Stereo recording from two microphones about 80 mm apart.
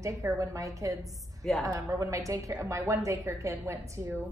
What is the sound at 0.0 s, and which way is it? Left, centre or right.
A woman's voice, right.